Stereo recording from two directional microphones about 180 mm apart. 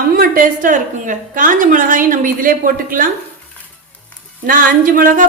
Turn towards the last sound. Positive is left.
turn(degrees=-50)  # may be behind; listen again after turning